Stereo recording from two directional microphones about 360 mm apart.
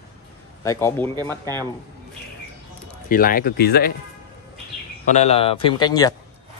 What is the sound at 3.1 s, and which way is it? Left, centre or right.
Speech, left.